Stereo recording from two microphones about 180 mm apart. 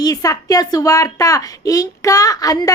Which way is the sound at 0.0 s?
20° left (ahead or behind).